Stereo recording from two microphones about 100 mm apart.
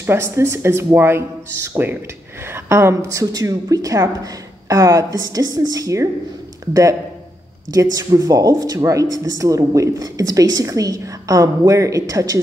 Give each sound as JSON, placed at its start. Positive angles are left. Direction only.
{"t": 0.0, "sound": "speech", "side_deg": -25}